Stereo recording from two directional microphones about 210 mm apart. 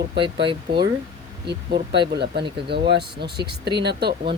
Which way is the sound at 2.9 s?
50° right (ahead or behind).